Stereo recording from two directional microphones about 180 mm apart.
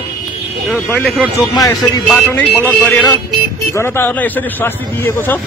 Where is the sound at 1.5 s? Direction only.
20° left (ahead or behind).